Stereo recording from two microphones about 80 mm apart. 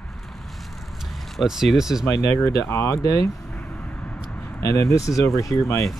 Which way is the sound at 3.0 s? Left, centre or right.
Left.